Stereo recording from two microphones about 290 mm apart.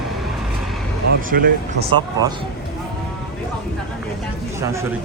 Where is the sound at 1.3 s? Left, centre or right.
Right.